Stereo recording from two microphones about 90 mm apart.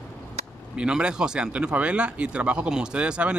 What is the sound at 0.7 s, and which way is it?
Speech, 10° right (ahead or behind).